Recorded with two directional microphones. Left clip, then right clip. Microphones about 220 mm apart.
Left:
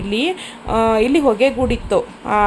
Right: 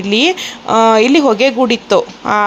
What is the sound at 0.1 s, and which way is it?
A woman's voice, 15° right (ahead or behind).